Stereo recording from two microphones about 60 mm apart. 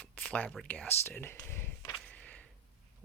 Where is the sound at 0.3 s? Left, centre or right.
Left.